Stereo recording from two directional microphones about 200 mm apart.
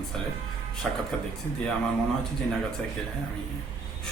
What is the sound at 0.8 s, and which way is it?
Speech, centre (ahead or behind).